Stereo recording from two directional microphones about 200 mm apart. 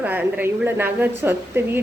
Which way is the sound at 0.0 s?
10° right (ahead or behind).